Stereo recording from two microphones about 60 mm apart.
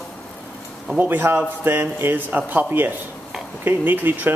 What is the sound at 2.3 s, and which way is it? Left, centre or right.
A man's voice, right.